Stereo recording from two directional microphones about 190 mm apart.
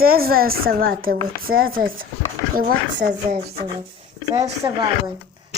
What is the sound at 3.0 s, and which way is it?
Speech, 50° right (ahead or behind).